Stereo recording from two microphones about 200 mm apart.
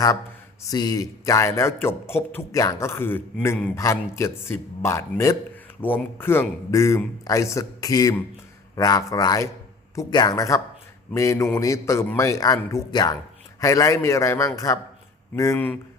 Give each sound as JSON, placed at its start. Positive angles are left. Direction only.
{"t": 0.7, "sound": "a man's voice", "side_deg": 20}